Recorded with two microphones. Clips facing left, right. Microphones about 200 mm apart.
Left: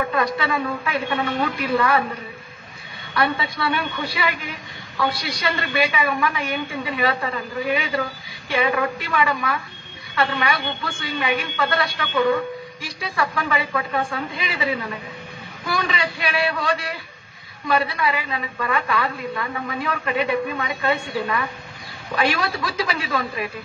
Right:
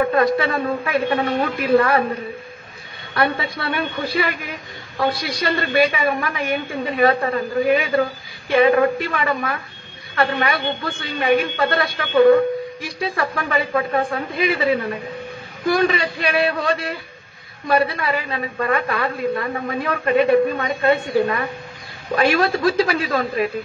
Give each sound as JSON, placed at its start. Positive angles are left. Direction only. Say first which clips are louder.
{"t": 0.0, "sound": "a woman's voice", "louder": "right 6 dB", "side_deg": -45}
{"t": 3.2, "sound": "a woman's voice", "louder": "right 2 dB", "side_deg": -50}
{"t": 17.9, "sound": "a woman's voice", "louder": "right 1 dB", "side_deg": -45}
{"t": 22.1, "sound": "a woman's voice", "louder": "right 5 dB", "side_deg": -50}